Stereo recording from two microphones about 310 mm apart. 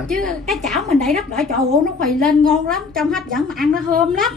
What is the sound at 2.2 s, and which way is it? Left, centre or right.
A woman's voice, centre.